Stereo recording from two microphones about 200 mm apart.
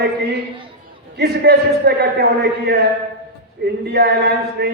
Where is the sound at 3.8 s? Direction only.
55° right (ahead or behind).